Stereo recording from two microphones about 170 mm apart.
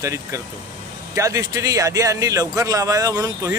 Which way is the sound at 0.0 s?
20° right (ahead or behind).